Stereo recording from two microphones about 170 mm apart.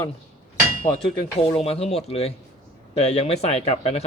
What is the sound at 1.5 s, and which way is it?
Speech, 35° left (ahead or behind).